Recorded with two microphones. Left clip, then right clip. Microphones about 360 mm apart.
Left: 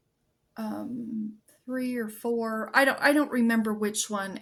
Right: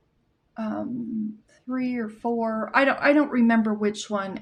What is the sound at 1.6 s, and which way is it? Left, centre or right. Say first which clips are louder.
Speech: right 3 dB; left.